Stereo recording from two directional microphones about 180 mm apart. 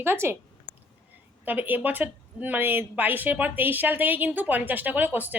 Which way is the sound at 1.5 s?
10° right (ahead or behind).